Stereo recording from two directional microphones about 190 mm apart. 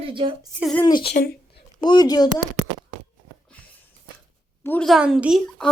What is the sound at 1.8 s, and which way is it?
Speech, 20° left (ahead or behind).